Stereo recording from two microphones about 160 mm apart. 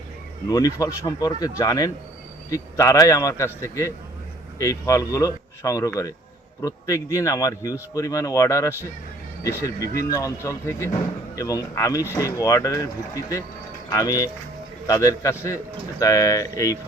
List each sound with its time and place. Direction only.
0.5 s speech: 20° left (ahead or behind)
10.0 s speech: 20° left (ahead or behind)